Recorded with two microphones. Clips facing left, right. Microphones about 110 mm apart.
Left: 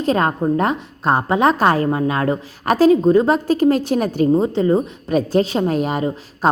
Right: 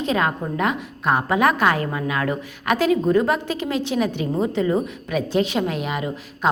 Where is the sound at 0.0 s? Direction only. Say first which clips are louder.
Left 5 dB; 40° left (ahead or behind).